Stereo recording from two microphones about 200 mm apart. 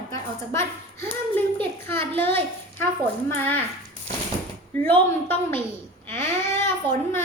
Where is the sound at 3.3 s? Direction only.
10° left (ahead or behind).